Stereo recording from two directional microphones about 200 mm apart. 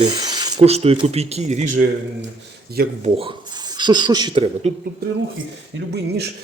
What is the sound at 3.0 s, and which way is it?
Speech, 25° right (ahead or behind).